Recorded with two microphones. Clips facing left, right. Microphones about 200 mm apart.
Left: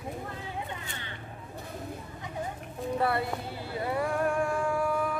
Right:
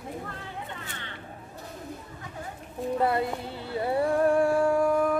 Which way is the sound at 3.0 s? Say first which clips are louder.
Right 3 dB; 20° right (ahead or behind).